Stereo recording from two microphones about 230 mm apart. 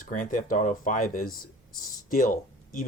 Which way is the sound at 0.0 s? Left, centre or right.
Left.